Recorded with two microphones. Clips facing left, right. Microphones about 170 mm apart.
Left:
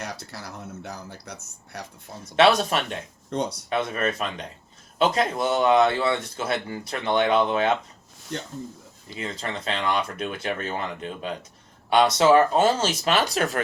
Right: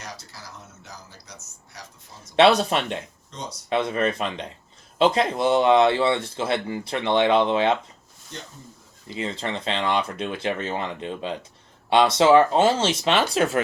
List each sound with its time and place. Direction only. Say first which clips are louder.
0.0 s speech: left 5 dB; 60° left (ahead or behind)
2.3 s speech: right 2 dB; 30° right (ahead or behind)
3.2 s speech: left 9 dB; 60° left (ahead or behind)
3.7 s speech: right 6 dB; 25° right (ahead or behind)
9.1 s speech: right 3 dB; 25° right (ahead or behind)